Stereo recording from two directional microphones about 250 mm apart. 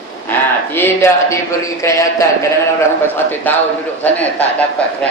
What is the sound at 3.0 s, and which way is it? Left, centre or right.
Speech, centre.